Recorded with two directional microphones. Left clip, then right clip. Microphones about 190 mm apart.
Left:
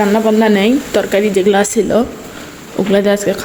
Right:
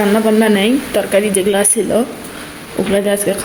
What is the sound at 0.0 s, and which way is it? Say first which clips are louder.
Speech: left 1 dB; 5° left (ahead or behind).